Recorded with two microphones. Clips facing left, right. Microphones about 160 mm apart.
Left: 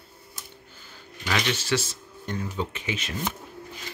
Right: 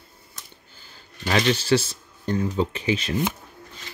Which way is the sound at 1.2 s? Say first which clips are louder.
Right 6 dB; 35° right (ahead or behind).